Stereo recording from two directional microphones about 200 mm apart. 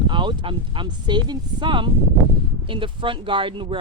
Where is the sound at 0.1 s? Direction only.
25° right (ahead or behind).